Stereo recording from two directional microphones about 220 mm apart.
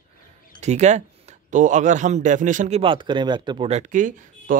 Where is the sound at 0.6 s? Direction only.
30° right (ahead or behind).